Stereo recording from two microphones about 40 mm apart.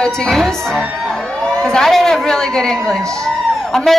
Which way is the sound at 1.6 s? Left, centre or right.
Centre.